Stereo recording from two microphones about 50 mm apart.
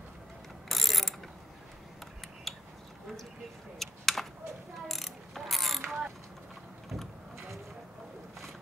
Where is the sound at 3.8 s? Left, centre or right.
Centre.